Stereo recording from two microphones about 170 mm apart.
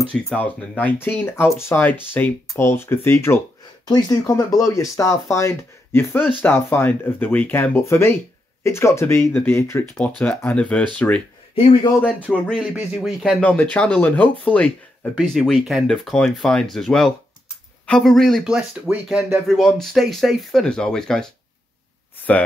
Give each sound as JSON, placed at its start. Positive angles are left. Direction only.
{"t": 0.0, "sound": "speech", "side_deg": 5}
{"t": 11.5, "sound": "speech", "side_deg": 35}
{"t": 12.0, "sound": "speech", "side_deg": 5}